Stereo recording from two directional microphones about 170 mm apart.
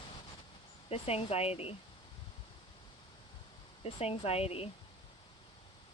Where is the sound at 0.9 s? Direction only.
35° left (ahead or behind).